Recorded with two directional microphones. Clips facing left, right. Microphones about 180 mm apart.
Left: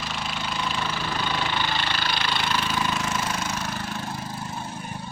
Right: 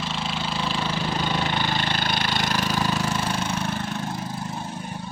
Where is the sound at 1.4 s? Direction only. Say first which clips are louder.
Right 2 dB; 45° right (ahead or behind); by 3.7 s 30° right (ahead or behind).